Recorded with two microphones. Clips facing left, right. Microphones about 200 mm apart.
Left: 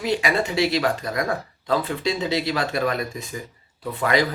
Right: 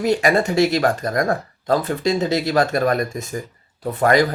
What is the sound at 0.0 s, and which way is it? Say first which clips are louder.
Speech: right 5 dB; 45° right (ahead or behind).